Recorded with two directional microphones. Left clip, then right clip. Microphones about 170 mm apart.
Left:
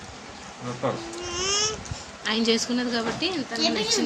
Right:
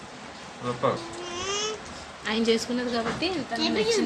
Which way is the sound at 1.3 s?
55° left (ahead or behind).